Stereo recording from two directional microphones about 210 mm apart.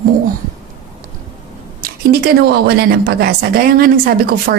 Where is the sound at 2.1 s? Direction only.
50° right (ahead or behind).